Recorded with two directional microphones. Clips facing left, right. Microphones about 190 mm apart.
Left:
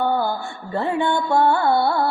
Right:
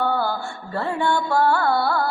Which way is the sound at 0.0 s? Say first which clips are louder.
Left 2 dB; 15° left (ahead or behind).